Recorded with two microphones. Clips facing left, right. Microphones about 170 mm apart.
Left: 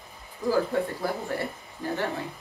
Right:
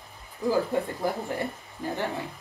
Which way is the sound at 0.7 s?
15° right (ahead or behind).